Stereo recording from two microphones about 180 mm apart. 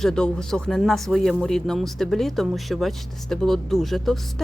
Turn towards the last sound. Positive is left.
turn(degrees=0)  # may be behind; listen again after turning